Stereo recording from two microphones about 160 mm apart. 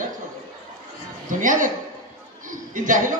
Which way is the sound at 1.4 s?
55° right (ahead or behind).